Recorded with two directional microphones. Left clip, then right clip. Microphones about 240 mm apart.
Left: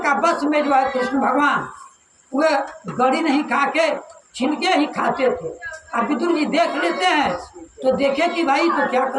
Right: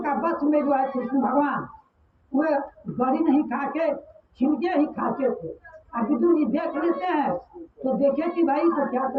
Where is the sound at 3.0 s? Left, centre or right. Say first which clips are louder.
Left 4 dB; left.